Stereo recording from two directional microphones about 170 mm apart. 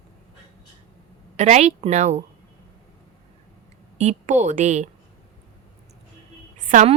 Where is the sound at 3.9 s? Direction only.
45° right (ahead or behind).